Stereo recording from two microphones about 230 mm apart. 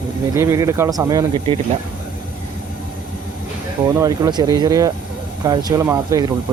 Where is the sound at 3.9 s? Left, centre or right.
Centre.